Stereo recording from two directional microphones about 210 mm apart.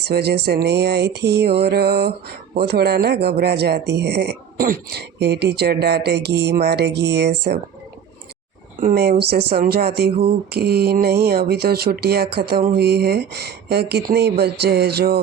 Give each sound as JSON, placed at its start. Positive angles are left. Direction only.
{"t": 0.0, "sound": "speech", "side_deg": -50}
{"t": 8.8, "sound": "speech", "side_deg": -45}